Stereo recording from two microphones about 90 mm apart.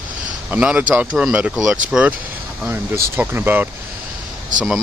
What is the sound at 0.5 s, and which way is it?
Speech, 15° right (ahead or behind).